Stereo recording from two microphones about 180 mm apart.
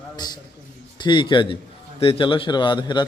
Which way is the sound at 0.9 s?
25° left (ahead or behind).